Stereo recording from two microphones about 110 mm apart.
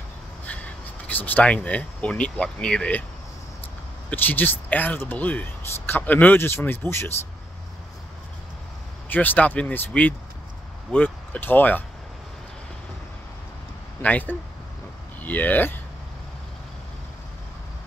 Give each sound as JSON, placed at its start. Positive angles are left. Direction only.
{"t": 1.0, "sound": "speech", "side_deg": 15}
{"t": 4.1, "sound": "speech", "side_deg": 15}
{"t": 9.1, "sound": "speech", "side_deg": 15}
{"t": 14.0, "sound": "speech", "side_deg": 15}